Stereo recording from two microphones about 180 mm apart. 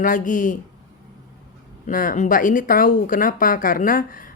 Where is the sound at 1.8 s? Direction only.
50° left (ahead or behind).